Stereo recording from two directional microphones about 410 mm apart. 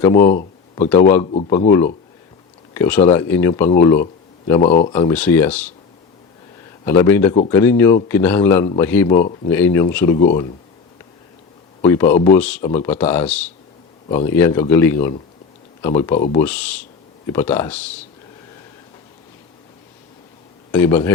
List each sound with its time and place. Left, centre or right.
0.0 s speech: centre
0.3 s a sound: centre
1.1 s speech: centre
6.8 s speech: centre
11.8 s speech: centre
20.7 s speech: centre